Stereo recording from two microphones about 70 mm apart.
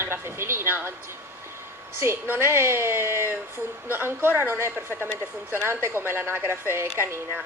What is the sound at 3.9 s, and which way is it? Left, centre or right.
A woman's voice, right.